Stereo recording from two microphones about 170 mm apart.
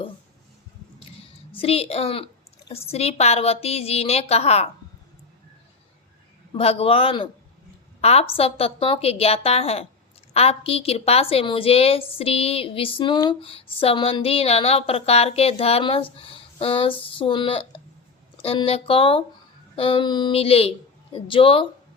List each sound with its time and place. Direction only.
1.5 s a woman's voice: 35° left (ahead or behind)
6.5 s a woman's voice: 35° left (ahead or behind)